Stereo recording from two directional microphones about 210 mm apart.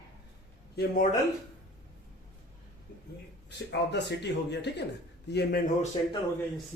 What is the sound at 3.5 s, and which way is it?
A man's voice, 55° left (ahead or behind).